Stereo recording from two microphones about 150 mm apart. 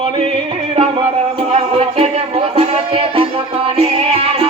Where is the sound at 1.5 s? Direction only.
40° right (ahead or behind).